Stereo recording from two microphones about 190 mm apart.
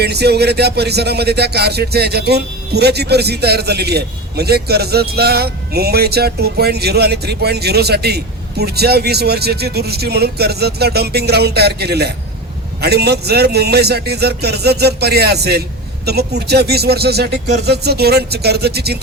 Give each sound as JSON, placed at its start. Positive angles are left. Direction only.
{"t": 0.0, "sound": "speech", "side_deg": -60}